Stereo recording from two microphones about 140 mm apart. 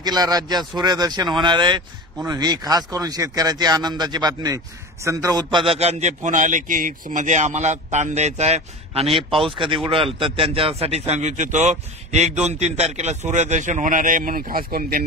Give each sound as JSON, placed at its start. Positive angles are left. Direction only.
{"t": 0.0, "sound": "speech", "side_deg": -30}
{"t": 5.7, "sound": "speech", "side_deg": -50}